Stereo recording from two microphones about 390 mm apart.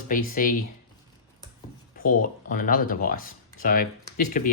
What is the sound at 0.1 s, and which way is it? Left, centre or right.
Speech, left.